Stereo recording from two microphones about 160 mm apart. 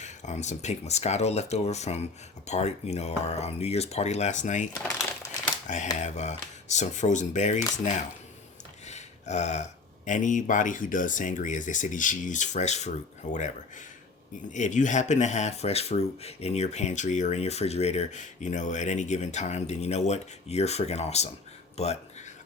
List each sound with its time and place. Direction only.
0.0 s speech: 45° left (ahead or behind)
8.9 s a sound: 45° left (ahead or behind)
10.1 s speech: 50° left (ahead or behind)
14.5 s speech: 50° left (ahead or behind)